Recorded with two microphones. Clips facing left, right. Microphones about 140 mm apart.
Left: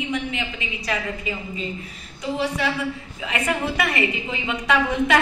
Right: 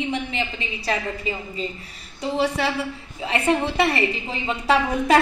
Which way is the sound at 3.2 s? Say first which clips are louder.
Right 4 dB; 30° right (ahead or behind).